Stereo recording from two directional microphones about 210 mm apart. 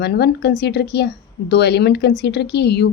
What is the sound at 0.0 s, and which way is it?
Speech, 50° left (ahead or behind).